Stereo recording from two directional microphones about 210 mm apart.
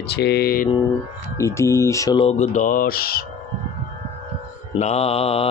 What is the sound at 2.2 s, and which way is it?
Speech, 30° left (ahead or behind).